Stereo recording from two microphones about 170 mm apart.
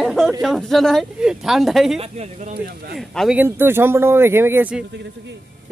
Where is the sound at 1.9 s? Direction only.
40° right (ahead or behind).